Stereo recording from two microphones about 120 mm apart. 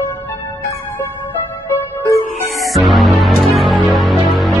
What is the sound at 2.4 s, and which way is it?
Music, centre (ahead or behind).